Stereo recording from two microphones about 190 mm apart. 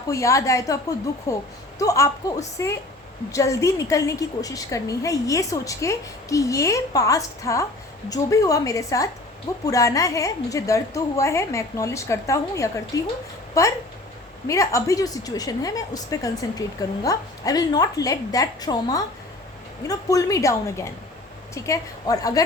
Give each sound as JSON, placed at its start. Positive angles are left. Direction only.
{"t": 0.1, "sound": "a woman's voice", "side_deg": 15}